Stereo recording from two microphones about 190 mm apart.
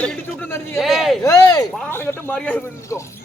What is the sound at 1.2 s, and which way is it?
Speech, 15° left (ahead or behind).